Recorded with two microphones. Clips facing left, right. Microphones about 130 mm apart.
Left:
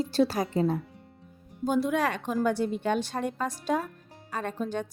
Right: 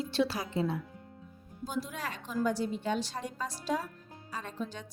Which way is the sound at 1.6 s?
65° left (ahead or behind).